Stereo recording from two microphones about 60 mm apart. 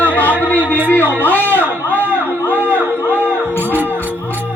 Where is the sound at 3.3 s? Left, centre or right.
Left.